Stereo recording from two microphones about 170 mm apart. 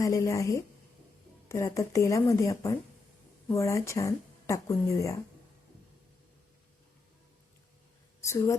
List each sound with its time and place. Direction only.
0.0 s a woman's voice: 20° left (ahead or behind)
8.2 s speech: 20° left (ahead or behind)